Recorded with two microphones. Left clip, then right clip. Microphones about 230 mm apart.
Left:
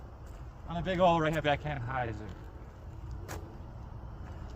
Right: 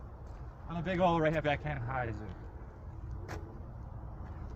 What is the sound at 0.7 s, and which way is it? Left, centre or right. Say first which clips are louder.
Speech: left 4 dB; left.